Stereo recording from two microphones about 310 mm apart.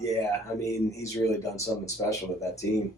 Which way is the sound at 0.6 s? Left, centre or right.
Centre.